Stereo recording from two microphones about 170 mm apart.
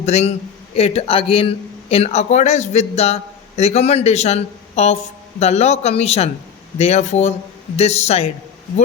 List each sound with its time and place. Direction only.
0.0 s speech: 40° left (ahead or behind)